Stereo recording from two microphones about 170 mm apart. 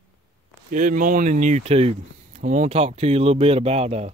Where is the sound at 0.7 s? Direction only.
50° right (ahead or behind).